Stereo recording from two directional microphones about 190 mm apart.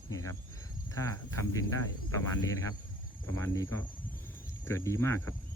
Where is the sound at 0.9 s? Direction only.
15° left (ahead or behind).